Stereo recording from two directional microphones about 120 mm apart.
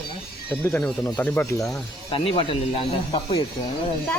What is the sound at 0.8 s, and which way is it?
Speech, 10° left (ahead or behind).